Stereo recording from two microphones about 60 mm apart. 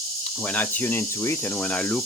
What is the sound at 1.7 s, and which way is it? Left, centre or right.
Speech, centre.